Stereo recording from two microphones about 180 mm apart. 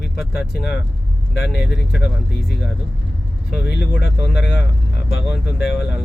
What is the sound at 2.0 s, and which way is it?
Speech, 70° left (ahead or behind).